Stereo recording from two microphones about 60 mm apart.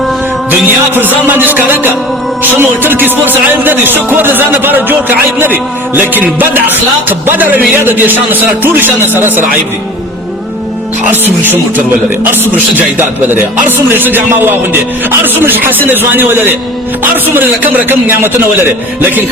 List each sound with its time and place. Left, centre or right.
0.9 s music: right
11.1 s music: right